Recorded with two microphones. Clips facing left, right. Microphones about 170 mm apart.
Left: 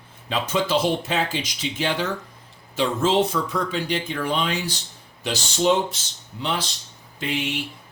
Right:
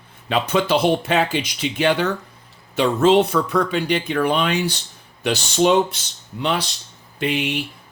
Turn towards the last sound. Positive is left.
turn(degrees=-65)  # may be behind; listen again after turning